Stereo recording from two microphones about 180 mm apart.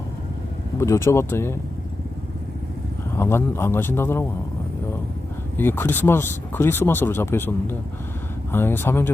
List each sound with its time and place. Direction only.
0.8 s speech: 15° left (ahead or behind)
3.2 s speech: 15° left (ahead or behind)
5.5 s speech: 10° left (ahead or behind)